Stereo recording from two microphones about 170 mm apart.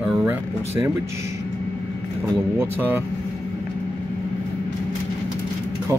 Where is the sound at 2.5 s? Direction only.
15° right (ahead or behind).